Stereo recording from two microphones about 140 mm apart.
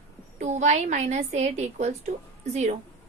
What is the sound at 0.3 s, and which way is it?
A woman's voice, 60° right (ahead or behind).